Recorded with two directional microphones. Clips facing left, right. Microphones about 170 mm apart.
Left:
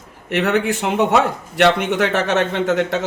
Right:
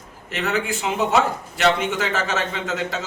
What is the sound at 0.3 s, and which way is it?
Speech, 65° left (ahead or behind).